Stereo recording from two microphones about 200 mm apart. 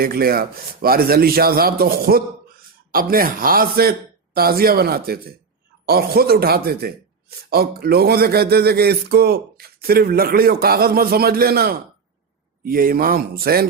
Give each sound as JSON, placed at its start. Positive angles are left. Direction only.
{"t": 0.0, "sound": "a man's voice", "side_deg": -50}